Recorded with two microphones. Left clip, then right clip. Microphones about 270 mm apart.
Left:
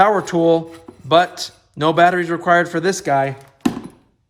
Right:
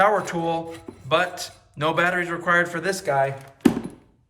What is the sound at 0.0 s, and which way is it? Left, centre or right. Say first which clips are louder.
A man's voice: left 6 dB; left.